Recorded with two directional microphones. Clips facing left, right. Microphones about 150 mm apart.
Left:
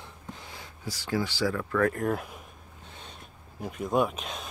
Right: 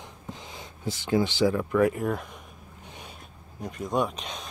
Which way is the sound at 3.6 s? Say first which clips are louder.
Left 1 dB; 5° left (ahead or behind).